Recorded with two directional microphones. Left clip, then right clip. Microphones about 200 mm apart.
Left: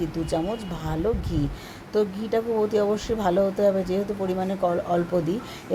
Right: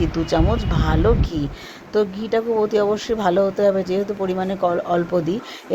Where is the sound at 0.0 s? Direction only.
10° right (ahead or behind).